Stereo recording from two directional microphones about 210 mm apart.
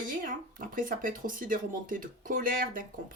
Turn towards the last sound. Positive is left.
turn(degrees=-40)  # may be behind; listen again after turning